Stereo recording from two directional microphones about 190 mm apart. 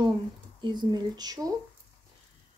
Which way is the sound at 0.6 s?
25° right (ahead or behind).